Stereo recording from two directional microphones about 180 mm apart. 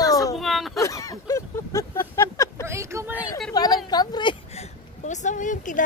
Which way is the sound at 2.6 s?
15° right (ahead or behind).